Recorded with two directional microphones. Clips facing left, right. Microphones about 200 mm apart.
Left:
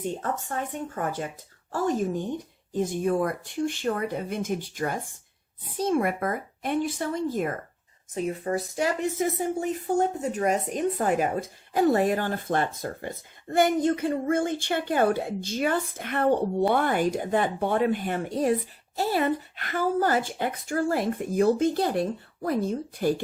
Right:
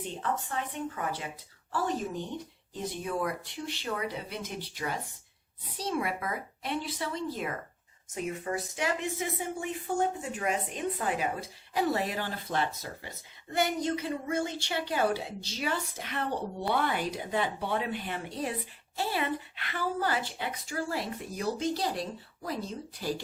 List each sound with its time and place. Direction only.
0.0 s speech: 45° left (ahead or behind)
8.1 s speech: 35° left (ahead or behind); by 23.2 s 55° left (ahead or behind)